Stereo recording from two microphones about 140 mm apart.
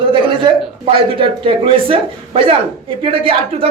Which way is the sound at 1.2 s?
40° right (ahead or behind).